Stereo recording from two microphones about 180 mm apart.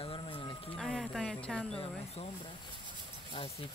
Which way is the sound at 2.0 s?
35° left (ahead or behind).